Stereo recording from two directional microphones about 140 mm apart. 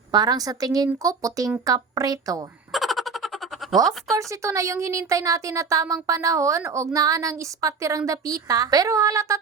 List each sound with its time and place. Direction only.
0.1 s speech: 30° right (ahead or behind)
2.7 s a sound: centre (ahead or behind)
4.1 s speech: 20° right (ahead or behind)